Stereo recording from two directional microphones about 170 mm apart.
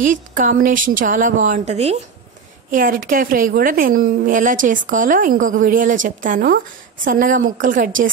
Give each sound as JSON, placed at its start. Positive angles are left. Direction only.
{"t": 0.0, "sound": "a woman's voice", "side_deg": -50}
{"t": 2.7, "sound": "a woman's voice", "side_deg": -55}